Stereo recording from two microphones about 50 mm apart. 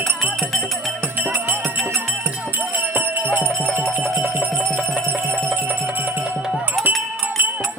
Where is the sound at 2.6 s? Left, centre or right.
Right.